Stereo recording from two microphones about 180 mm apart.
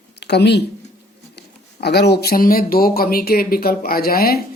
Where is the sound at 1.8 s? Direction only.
65° left (ahead or behind).